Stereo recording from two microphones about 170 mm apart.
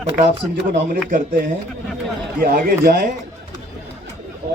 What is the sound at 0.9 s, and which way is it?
A man's voice, 55° right (ahead or behind).